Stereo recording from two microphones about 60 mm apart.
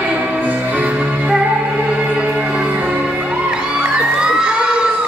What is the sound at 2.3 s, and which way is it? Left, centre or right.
Music, centre.